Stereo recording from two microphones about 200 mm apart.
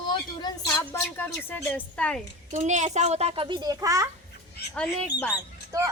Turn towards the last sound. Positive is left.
turn(degrees=-15)  # may be behind; listen again after turning